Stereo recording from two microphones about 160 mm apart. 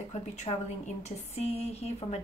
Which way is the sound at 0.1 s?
45° left (ahead or behind).